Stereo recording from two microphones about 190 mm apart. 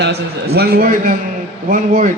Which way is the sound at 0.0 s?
60° right (ahead or behind).